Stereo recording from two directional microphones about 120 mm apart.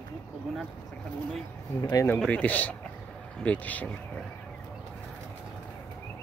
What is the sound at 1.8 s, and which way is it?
Speech, 20° left (ahead or behind).